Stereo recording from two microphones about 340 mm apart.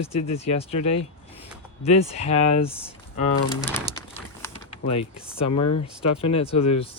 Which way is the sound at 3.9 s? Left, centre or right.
Centre.